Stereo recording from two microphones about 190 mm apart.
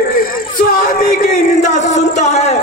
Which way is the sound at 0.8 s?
40° left (ahead or behind).